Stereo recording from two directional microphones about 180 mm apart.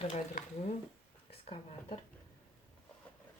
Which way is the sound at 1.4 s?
30° left (ahead or behind).